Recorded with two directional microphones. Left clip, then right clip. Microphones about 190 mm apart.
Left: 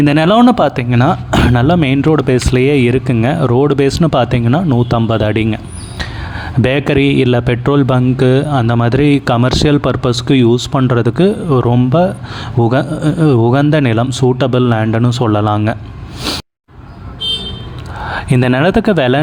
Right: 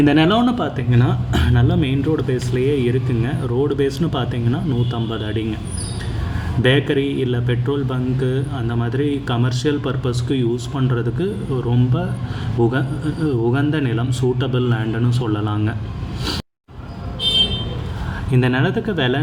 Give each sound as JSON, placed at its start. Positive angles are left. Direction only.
{"t": 0.0, "sound": "speech", "side_deg": 50}
{"t": 6.6, "sound": "speech", "side_deg": 55}
{"t": 18.1, "sound": "speech", "side_deg": 55}